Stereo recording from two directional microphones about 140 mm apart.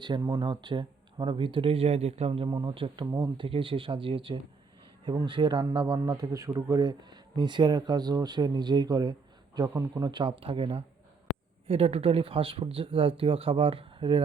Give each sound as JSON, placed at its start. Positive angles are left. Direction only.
{"t": 0.0, "sound": "a man's voice", "side_deg": -30}